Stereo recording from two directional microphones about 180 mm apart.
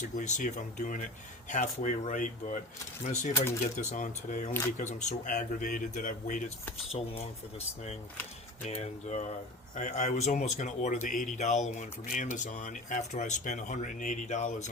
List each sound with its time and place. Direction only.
0.2 s speech: 45° left (ahead or behind)
8.6 s speech: 40° left (ahead or behind)